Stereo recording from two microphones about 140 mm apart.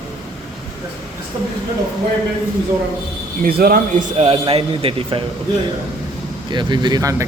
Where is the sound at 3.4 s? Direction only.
90° right; by 4.2 s 65° right (ahead or behind).